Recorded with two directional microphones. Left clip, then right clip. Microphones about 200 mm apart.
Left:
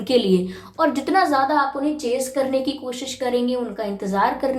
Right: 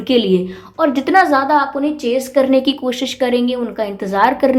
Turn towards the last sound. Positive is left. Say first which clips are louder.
# right 7 dB
turn(degrees=-35)  # may be behind; listen again after turning